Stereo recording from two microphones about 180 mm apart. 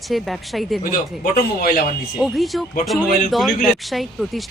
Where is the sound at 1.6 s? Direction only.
55° left (ahead or behind).